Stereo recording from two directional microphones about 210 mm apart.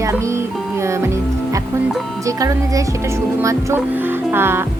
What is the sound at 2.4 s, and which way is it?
Speech, 15° right (ahead or behind).